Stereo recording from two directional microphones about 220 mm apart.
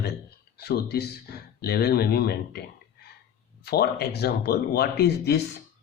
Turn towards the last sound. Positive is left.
turn(degrees=50)  # may be behind; listen again after turning